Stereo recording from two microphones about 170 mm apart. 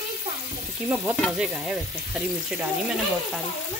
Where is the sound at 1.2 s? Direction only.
Centre (ahead or behind).